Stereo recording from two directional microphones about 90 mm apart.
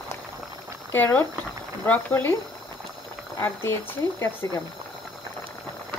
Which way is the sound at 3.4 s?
25° left (ahead or behind).